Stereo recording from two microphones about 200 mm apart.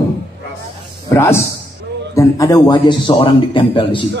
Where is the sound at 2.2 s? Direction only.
15° left (ahead or behind).